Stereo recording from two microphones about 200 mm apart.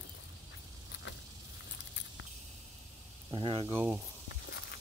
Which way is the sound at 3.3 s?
25° right (ahead or behind).